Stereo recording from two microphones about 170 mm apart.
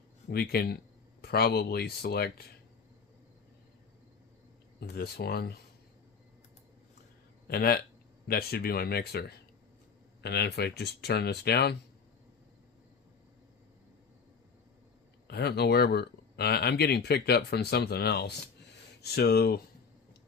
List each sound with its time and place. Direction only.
0.3 s speech: 65° left (ahead or behind)
4.8 s speech: 65° left (ahead or behind)
7.4 s speech: 65° left (ahead or behind)
10.2 s speech: 75° left (ahead or behind)
15.3 s speech: 70° left (ahead or behind)